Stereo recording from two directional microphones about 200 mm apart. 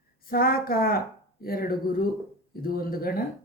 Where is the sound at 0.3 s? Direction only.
50° left (ahead or behind).